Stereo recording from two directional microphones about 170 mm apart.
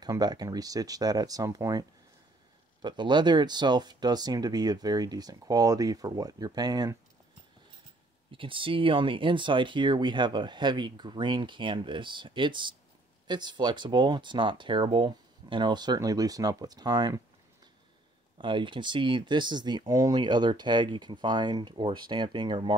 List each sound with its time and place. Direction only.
0.0 s speech: 25° right (ahead or behind)
8.3 s speech: 30° right (ahead or behind)
18.4 s speech: 30° right (ahead or behind)